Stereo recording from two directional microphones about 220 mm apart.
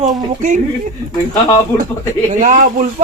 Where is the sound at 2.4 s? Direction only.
35° right (ahead or behind).